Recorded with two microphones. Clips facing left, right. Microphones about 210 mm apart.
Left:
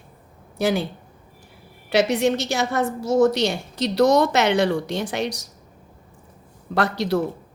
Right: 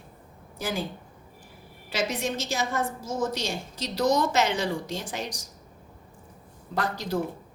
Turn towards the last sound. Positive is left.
turn(degrees=75)  # may be behind; listen again after turning